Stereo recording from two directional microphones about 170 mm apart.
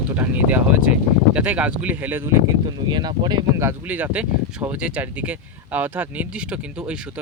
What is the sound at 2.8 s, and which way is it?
Speech, 25° right (ahead or behind).